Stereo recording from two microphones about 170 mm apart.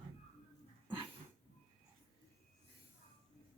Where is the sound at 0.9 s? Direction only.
30° right (ahead or behind).